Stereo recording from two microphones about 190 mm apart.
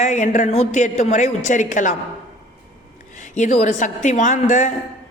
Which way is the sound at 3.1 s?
40° left (ahead or behind).